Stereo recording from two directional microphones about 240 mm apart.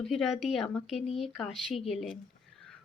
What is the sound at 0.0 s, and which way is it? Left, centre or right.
Speech, centre.